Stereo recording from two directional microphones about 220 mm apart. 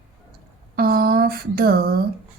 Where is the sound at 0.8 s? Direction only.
45° right (ahead or behind).